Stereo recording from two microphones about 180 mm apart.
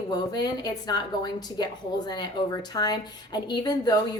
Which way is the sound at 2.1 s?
20° left (ahead or behind).